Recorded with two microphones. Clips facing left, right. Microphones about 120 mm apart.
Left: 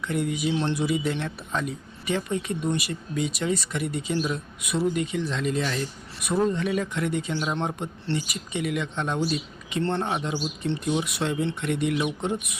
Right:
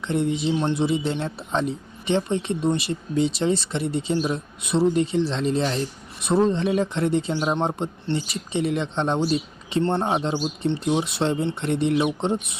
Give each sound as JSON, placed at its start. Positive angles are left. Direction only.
{"t": 0.0, "sound": "speech", "side_deg": -25}